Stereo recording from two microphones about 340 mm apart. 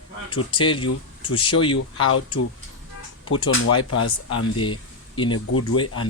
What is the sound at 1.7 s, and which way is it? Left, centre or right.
Speech, left.